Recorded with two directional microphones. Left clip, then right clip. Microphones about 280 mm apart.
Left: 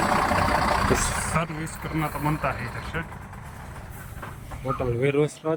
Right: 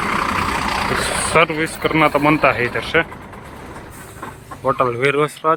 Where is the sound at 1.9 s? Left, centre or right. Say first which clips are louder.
Right 14 dB; right.